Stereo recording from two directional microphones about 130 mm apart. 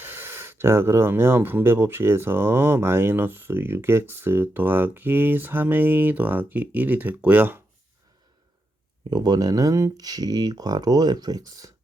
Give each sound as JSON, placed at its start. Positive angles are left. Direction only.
{"t": 0.0, "sound": "speech", "side_deg": -15}
{"t": 9.0, "sound": "speech", "side_deg": -35}